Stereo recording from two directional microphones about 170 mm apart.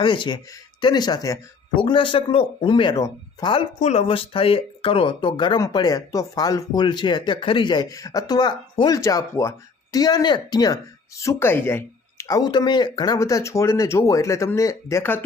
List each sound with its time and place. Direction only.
0.0 s speech: 25° left (ahead or behind)
3.8 s speech: 40° left (ahead or behind); by 15.2 s 15° left (ahead or behind)